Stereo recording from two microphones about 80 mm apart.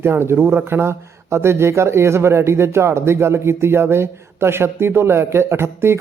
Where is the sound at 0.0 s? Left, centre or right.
Right.